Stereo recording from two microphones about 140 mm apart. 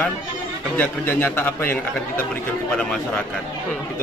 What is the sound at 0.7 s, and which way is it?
A man's voice, 15° left (ahead or behind).